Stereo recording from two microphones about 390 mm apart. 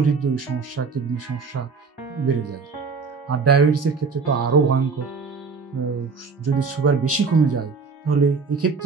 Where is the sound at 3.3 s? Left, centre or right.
Right.